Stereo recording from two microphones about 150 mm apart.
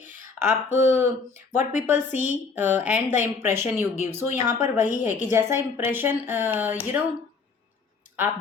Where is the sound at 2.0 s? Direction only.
50° left (ahead or behind).